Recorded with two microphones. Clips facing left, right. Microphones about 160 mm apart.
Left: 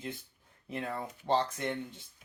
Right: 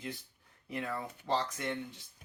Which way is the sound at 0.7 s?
30° left (ahead or behind).